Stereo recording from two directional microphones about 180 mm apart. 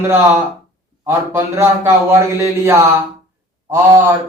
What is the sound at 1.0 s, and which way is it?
Speech, 15° right (ahead or behind).